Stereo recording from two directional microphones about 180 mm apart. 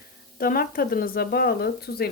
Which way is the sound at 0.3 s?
55° left (ahead or behind).